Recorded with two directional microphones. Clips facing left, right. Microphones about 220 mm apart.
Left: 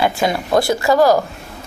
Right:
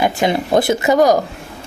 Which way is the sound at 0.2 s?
25° right (ahead or behind).